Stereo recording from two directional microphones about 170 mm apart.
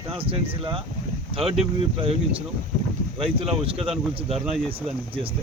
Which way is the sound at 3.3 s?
35° right (ahead or behind).